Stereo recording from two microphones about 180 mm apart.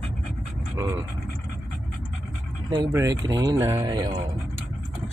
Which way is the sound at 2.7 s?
20° right (ahead or behind).